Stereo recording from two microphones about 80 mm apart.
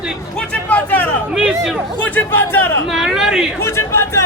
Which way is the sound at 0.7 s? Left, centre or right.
Left.